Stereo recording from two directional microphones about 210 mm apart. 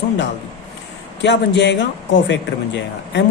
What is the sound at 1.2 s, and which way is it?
Speech, 55° left (ahead or behind).